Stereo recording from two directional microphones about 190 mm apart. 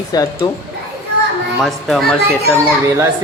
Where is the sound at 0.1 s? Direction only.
20° left (ahead or behind).